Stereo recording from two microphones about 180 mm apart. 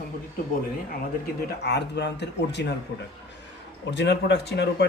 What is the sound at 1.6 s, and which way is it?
Speech, 70° left (ahead or behind).